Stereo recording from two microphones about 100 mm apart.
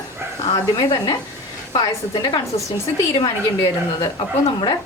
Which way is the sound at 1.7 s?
45° left (ahead or behind).